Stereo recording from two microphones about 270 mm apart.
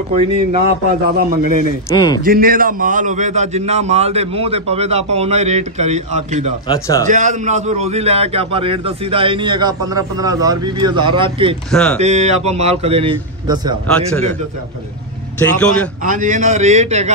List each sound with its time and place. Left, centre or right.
0.1 s a man's voice: right
1.1 s a man's voice: right
1.9 s speech: centre
2.2 s a man's voice: right
6.7 s speech: centre
7.1 s a man's voice: right
11.7 s speech: centre
12.0 s a man's voice: right
13.8 s speech: centre
15.3 s speech: centre
16.0 s a man's voice: right